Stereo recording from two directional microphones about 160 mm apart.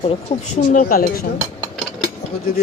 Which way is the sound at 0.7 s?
55° left (ahead or behind).